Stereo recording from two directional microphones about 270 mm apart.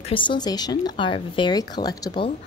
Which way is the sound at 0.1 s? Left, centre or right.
Centre.